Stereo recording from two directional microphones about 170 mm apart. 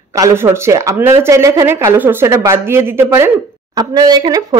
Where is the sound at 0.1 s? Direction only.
15° right (ahead or behind).